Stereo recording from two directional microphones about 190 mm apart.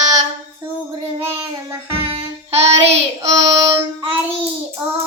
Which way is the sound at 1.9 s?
30° right (ahead or behind).